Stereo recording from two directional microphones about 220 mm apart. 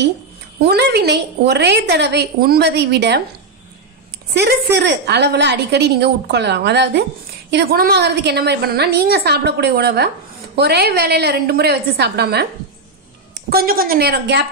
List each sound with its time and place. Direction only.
0.6 s a woman's voice: 50° right (ahead or behind)
4.3 s a woman's voice: 50° right (ahead or behind)
13.5 s a woman's voice: 45° right (ahead or behind)